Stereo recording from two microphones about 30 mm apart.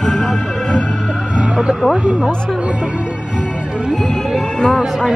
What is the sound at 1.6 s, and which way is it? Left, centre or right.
Vehicle, right.